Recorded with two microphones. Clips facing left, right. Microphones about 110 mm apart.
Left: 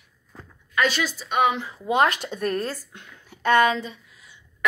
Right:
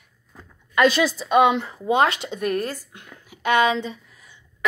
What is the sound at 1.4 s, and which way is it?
Speech, 65° right (ahead or behind).